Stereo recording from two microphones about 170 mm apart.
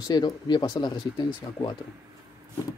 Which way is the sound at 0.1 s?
25° left (ahead or behind).